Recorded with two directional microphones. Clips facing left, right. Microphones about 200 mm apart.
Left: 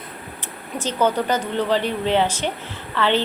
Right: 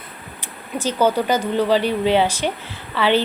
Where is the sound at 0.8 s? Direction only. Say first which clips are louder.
Right 2 dB; 10° right (ahead or behind).